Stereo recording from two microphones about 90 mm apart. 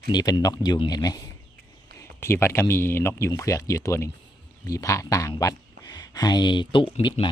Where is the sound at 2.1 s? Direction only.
30° left (ahead or behind).